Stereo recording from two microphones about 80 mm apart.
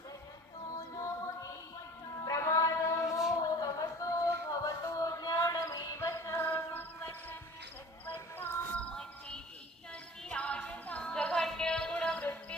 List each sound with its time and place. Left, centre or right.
0.9 s music: left
3.4 s a sound: left
8.0 s music: left
8.8 s music: centre